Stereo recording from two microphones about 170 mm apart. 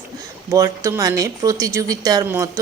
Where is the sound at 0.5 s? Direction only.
20° right (ahead or behind).